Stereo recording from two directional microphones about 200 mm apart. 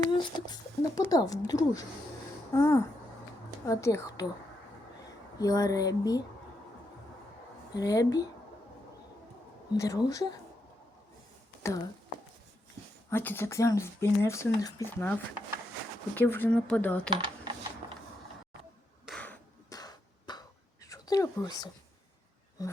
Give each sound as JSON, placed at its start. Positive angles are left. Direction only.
{"t": 0.1, "sound": "speech", "side_deg": 25}
{"t": 5.4, "sound": "speech", "side_deg": 15}
{"t": 7.8, "sound": "speech", "side_deg": 15}
{"t": 9.7, "sound": "speech", "side_deg": 15}
{"t": 11.6, "sound": "speech", "side_deg": 15}
{"t": 13.1, "sound": "speech", "side_deg": 10}
{"t": 17.1, "sound": "a sound", "side_deg": -25}
{"t": 19.0, "sound": "a sound", "side_deg": 5}
{"t": 19.7, "sound": "a sound", "side_deg": 20}
{"t": 20.9, "sound": "speech", "side_deg": 15}